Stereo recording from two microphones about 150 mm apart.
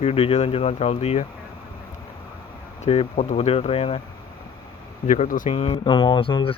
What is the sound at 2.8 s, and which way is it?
Speech, 45° left (ahead or behind).